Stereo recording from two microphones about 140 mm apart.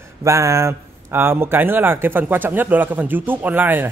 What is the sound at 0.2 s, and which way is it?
Speech, 20° right (ahead or behind).